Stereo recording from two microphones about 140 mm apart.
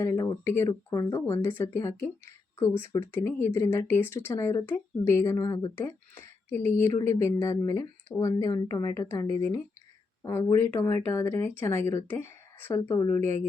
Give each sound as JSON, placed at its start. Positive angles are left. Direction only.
{"t": 0.0, "sound": "speech", "side_deg": 20}